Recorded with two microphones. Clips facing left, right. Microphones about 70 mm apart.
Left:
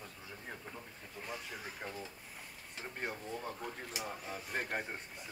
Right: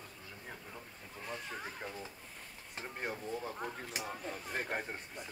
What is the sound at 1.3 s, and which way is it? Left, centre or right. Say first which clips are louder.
Speech: right 3 dB; centre.